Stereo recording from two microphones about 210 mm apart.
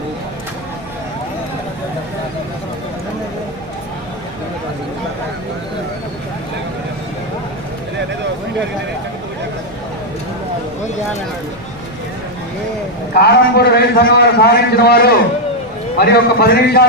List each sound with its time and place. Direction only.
13.1 s a man's voice: 50° left (ahead or behind)